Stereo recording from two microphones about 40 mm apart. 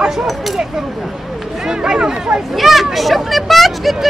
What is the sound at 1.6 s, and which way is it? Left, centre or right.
Speech, centre.